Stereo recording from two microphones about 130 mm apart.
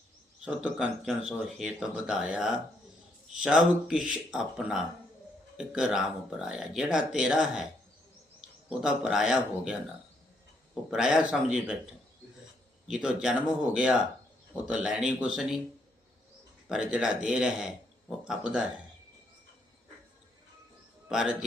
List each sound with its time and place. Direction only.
0.4 s speech: 5° right (ahead or behind)
10.9 s speech: 5° right (ahead or behind)
12.9 s speech: 5° right (ahead or behind)
16.6 s speech: 5° right (ahead or behind)
21.1 s a man's voice: 5° right (ahead or behind)